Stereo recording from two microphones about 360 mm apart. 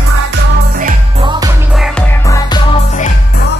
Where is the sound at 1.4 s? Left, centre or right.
Centre.